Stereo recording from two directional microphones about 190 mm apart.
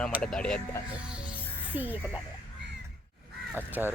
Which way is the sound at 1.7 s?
10° right (ahead or behind).